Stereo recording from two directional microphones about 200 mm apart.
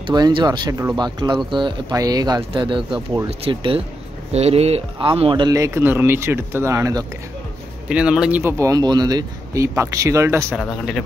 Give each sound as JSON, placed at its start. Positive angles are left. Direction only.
{"t": 0.0, "sound": "speech", "side_deg": -20}
{"t": 7.9, "sound": "speech", "side_deg": -5}
{"t": 10.5, "sound": "speech", "side_deg": 0}